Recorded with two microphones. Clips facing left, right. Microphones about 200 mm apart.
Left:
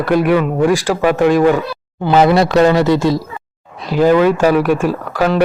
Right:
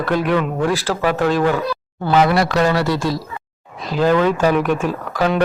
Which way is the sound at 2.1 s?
25° left (ahead or behind).